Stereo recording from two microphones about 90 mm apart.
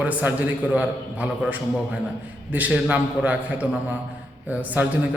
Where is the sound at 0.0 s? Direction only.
15° right (ahead or behind).